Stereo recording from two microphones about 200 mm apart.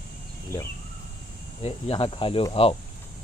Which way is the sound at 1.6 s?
30° left (ahead or behind).